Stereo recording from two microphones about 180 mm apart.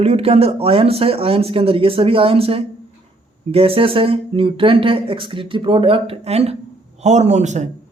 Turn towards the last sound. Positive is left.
turn(degrees=-40)  # may be behind; listen again after turning